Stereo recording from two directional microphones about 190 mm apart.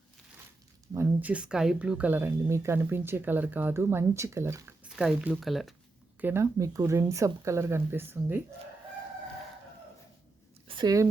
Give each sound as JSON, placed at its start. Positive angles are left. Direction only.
{"t": 0.9, "sound": "speech", "side_deg": -5}
{"t": 6.1, "sound": "speech", "side_deg": -10}
{"t": 10.7, "sound": "speech", "side_deg": -20}